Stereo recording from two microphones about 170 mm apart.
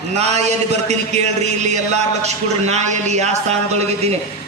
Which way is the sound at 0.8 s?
40° right (ahead or behind).